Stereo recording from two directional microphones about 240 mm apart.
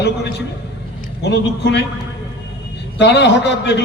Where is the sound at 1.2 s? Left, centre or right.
Left.